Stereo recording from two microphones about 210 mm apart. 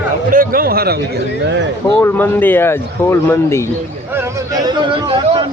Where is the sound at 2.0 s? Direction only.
10° left (ahead or behind).